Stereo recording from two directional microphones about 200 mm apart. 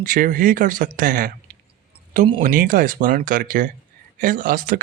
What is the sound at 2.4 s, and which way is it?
Speech, 45° right (ahead or behind).